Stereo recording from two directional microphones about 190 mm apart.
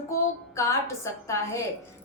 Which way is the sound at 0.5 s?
15° left (ahead or behind).